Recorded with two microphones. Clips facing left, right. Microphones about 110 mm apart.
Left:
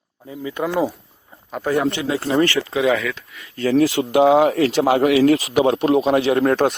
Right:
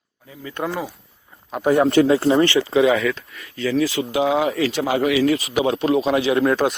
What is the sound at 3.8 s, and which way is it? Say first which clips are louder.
Speech: left 5 dB; 70° left (ahead or behind).